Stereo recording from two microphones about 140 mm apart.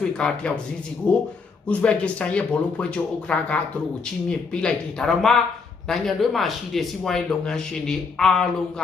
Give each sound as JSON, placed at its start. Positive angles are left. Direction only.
{"t": 0.2, "sound": "speech", "side_deg": 5}